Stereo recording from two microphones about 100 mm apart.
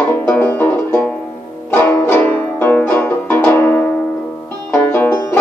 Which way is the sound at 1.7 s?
20° left (ahead or behind).